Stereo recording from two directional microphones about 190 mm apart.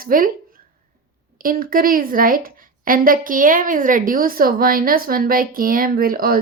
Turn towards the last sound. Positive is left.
turn(degrees=-50)  # may be behind; listen again after turning